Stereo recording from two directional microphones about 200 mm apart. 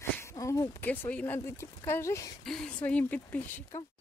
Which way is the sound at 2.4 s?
5° left (ahead or behind).